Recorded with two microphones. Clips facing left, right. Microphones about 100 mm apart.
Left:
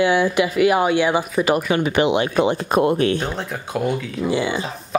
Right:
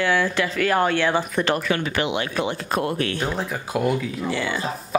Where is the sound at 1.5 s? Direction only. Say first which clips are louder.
Left 5 dB; 15° left (ahead or behind).